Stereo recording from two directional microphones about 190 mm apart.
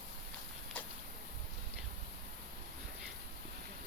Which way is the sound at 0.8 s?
5° left (ahead or behind).